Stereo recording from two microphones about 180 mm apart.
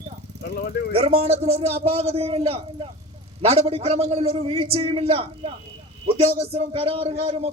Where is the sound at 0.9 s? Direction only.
35° right (ahead or behind).